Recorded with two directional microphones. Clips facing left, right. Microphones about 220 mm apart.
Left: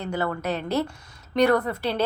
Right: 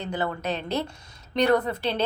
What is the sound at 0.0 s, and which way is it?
A woman's voice, 20° right (ahead or behind).